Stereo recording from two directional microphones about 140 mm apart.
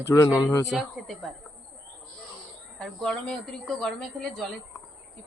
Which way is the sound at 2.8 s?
5° left (ahead or behind).